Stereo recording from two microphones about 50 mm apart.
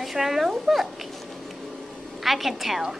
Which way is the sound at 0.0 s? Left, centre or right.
Centre.